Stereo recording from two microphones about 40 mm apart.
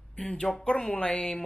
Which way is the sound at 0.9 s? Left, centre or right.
Left.